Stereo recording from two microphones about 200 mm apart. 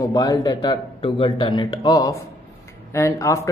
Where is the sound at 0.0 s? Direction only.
20° left (ahead or behind).